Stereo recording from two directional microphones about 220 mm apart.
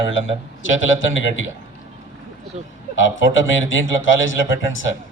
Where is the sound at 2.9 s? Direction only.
60° left (ahead or behind).